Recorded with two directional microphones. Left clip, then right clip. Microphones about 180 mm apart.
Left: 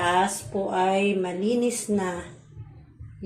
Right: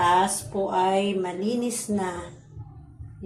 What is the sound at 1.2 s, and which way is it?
Speech, 15° left (ahead or behind).